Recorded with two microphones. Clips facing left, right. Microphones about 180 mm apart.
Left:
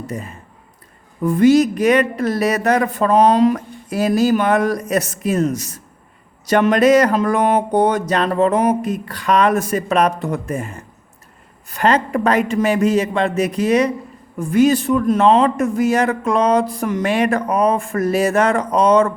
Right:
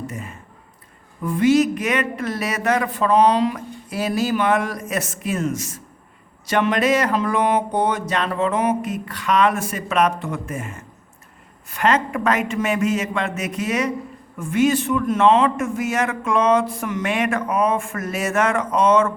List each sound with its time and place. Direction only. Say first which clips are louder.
1.2 s a man's voice: left 4 dB; 40° left (ahead or behind)